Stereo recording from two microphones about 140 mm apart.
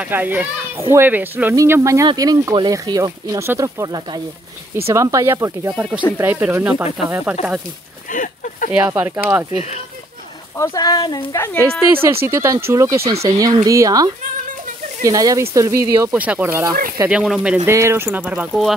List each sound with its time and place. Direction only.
0.0 s a child's voice: 10° right (ahead or behind)
8.1 s speech: 70° left (ahead or behind)
8.7 s a child's voice: 10° right (ahead or behind)
10.6 s speech: 30° left (ahead or behind)
11.3 s speech: 20° left (ahead or behind)
11.6 s a child's voice: 15° right (ahead or behind)
13.0 s speech: 45° right (ahead or behind)
13.7 s speech: 25° right (ahead or behind)
16.1 s a child's voice: 10° right (ahead or behind)
17.1 s a child's voice: 5° right (ahead or behind)
17.6 s a child's voice: 20° right (ahead or behind)